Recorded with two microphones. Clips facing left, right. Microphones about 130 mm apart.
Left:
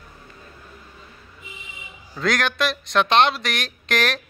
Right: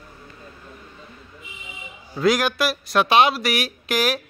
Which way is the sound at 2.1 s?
5° right (ahead or behind).